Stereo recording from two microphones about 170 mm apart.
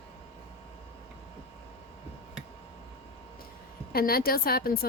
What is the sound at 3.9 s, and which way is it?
Speech, 60° left (ahead or behind).